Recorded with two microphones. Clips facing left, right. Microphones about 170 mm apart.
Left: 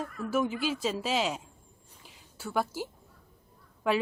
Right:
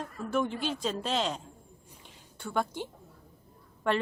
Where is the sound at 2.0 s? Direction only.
5° left (ahead or behind).